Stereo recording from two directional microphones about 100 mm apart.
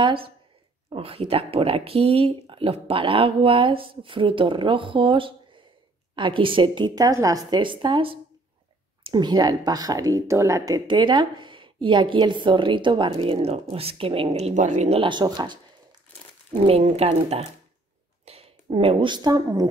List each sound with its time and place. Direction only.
0.0 s speech: 65° right (ahead or behind)
7.0 s a woman's voice: 35° right (ahead or behind); by 8.2 s 60° right (ahead or behind)
9.0 s a woman's voice: 45° right (ahead or behind)
10.9 s speech: 50° right (ahead or behind); by 15.0 s 90° right
15.0 s a woman's voice: 50° right (ahead or behind)
16.5 s speech: 85° right; by 19.7 s 40° right (ahead or behind)